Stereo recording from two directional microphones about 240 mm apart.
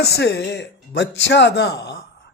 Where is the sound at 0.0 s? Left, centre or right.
Left.